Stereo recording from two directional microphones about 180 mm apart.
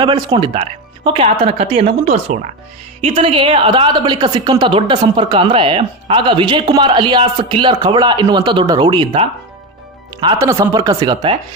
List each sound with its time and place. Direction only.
0.0 s a woman's voice: 30° right (ahead or behind)